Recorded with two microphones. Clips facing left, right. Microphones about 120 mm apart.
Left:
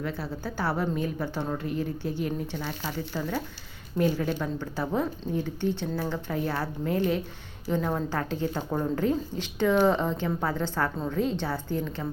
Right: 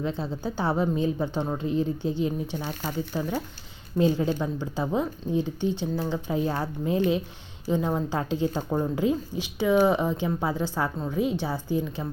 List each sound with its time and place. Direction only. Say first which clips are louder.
0.0 s a woman's voice: right 3 dB; 20° right (ahead or behind)